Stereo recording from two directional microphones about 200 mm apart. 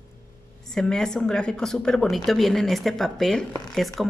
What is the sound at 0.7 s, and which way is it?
Speech, 5° left (ahead or behind).